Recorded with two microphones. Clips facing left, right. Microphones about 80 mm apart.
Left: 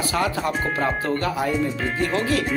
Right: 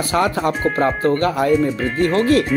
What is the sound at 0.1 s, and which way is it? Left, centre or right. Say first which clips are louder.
Speech: right 7 dB; right.